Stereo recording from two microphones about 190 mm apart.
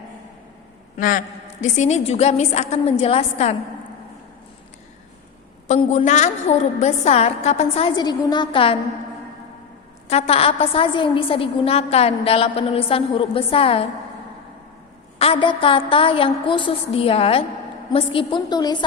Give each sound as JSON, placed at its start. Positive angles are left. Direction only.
{"t": 0.9, "sound": "a man's voice", "side_deg": 45}
{"t": 5.8, "sound": "a woman's voice", "side_deg": 30}
{"t": 10.1, "sound": "a woman's voice", "side_deg": 30}
{"t": 15.2, "sound": "a woman's voice", "side_deg": 30}